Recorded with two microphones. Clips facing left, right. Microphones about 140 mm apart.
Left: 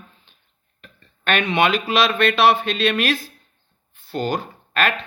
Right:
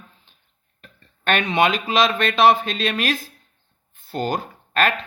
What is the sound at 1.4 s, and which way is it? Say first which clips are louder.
Speech: left 1 dB; 40° right (ahead or behind).